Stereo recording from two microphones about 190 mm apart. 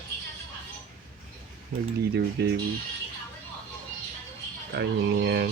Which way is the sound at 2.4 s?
60° right (ahead or behind).